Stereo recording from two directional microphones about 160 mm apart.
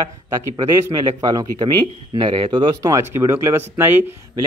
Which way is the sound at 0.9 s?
20° right (ahead or behind).